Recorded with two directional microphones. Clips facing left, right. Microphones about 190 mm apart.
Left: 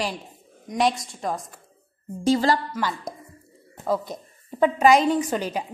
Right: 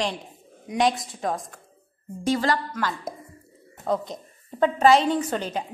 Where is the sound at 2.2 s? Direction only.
30° left (ahead or behind).